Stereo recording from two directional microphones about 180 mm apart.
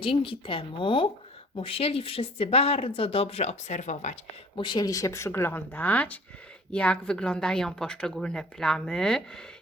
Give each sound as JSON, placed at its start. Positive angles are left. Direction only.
{"t": 0.0, "sound": "a woman's voice", "side_deg": 30}
{"t": 4.5, "sound": "speech", "side_deg": 25}